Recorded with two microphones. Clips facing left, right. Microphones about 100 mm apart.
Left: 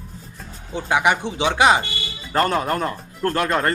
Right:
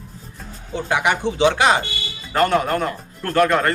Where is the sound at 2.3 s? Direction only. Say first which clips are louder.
Right 2 dB; 35° left (ahead or behind).